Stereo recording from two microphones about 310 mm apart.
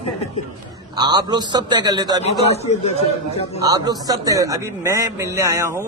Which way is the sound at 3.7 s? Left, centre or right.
Centre.